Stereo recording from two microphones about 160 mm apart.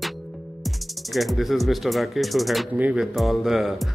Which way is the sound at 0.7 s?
Centre (ahead or behind).